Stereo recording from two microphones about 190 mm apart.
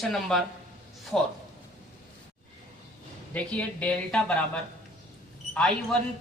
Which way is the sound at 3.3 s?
5° left (ahead or behind).